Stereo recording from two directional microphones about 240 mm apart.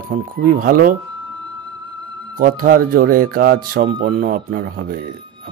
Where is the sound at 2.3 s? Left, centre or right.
Right.